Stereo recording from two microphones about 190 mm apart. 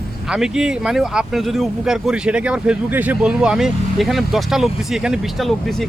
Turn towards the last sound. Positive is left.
turn(degrees=0)  # may be behind; listen again after turning